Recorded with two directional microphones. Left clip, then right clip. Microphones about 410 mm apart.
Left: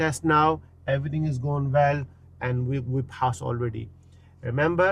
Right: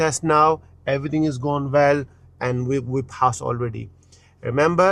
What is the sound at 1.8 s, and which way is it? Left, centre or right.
Speech, right.